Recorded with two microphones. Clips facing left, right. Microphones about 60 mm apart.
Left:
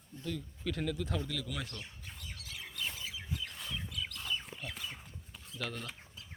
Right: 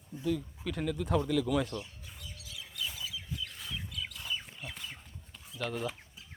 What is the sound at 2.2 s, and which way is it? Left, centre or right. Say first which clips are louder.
Bird: left 1 dB; left.